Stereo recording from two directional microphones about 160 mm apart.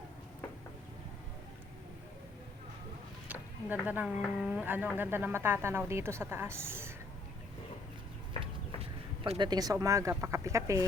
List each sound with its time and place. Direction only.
3.2 s a woman's voice: 10° right (ahead or behind)
8.4 s speech: 35° right (ahead or behind); by 10.8 s 20° right (ahead or behind)